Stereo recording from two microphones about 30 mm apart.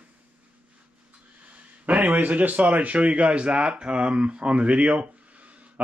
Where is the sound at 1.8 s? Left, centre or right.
Right.